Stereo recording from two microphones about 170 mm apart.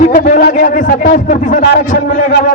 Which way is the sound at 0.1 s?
60° left (ahead or behind).